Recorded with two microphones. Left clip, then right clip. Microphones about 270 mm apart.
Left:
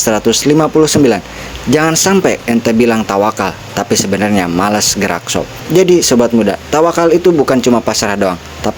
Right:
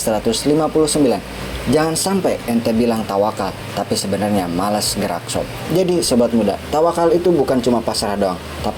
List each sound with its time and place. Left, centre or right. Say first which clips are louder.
0.0 s speech: left 6 dB; left